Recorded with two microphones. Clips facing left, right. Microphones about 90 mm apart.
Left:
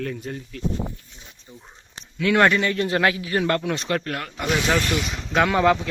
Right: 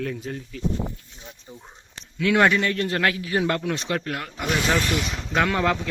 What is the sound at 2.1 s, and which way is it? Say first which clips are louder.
Speech: left 1 dB; centre (ahead or behind).